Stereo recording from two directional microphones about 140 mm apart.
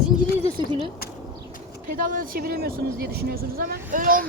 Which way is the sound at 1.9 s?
80° right.